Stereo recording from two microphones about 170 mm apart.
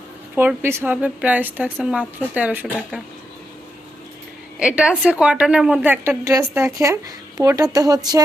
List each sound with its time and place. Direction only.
0.3 s a woman's voice: 15° right (ahead or behind)
4.6 s a woman's voice: 5° right (ahead or behind); by 8.2 s 20° right (ahead or behind)